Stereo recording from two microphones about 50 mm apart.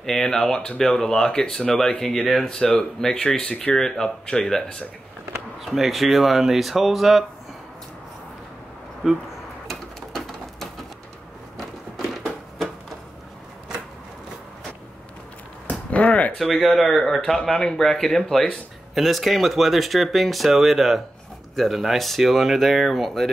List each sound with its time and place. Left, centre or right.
0.0 s speech: centre
5.6 s speech: centre
9.0 s speech: centre
9.7 s a sound: centre
15.6 s a sound: left
16.3 s speech: centre